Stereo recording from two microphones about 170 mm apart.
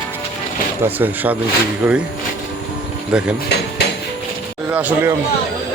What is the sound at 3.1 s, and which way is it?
Speech, 5° right (ahead or behind).